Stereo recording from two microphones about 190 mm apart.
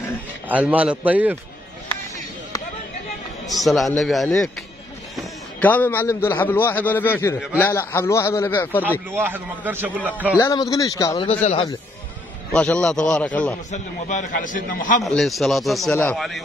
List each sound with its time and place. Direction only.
0.5 s a man's voice: 10° right (ahead or behind)
3.6 s a man's voice: centre (ahead or behind)
9.1 s a man's voice: 10° right (ahead or behind)
10.3 s speech: 15° left (ahead or behind)
11.2 s a man's voice: 30° left (ahead or behind)
12.5 s a man's voice: 5° left (ahead or behind)
13.7 s a man's voice: 40° left (ahead or behind)
15.0 s a man's voice: centre (ahead or behind)
15.9 s a man's voice: 10° left (ahead or behind)
16.2 s a man's voice: centre (ahead or behind)